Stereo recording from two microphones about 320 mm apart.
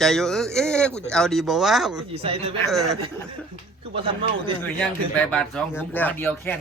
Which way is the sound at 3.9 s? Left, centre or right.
Centre.